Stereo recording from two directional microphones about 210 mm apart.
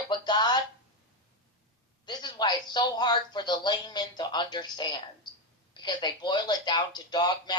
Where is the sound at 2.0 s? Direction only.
20° left (ahead or behind).